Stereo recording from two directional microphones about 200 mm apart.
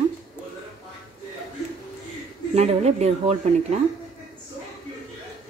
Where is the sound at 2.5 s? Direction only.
30° right (ahead or behind).